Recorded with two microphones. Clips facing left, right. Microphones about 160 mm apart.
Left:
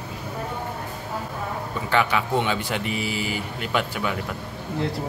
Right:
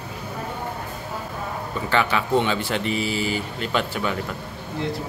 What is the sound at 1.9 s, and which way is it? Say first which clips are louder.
Speech: right 1 dB; 10° left (ahead or behind).